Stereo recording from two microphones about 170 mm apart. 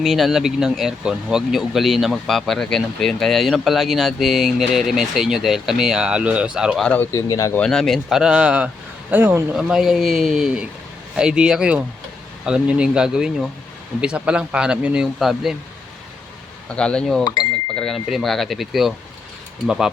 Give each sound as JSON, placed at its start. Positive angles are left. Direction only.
{"t": 0.0, "sound": "speech", "side_deg": 0}
{"t": 6.8, "sound": "speech", "side_deg": 10}
{"t": 7.6, "sound": "speech", "side_deg": 0}
{"t": 16.7, "sound": "speech", "side_deg": 5}